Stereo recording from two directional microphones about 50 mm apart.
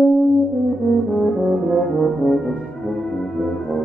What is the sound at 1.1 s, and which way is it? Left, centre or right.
Brass instrument, centre.